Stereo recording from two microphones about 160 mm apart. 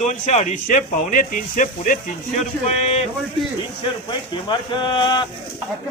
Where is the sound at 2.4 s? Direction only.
40° left (ahead or behind).